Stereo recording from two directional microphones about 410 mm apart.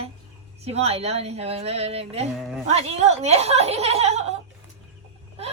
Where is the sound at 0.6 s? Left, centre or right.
Centre.